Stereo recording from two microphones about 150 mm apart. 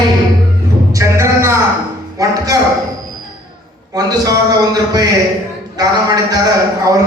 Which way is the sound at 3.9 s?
25° right (ahead or behind).